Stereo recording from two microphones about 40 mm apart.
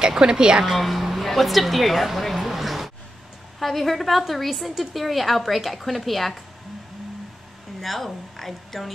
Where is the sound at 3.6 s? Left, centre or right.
Centre.